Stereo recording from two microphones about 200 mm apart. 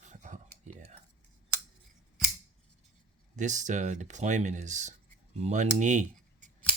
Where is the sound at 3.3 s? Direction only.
40° right (ahead or behind).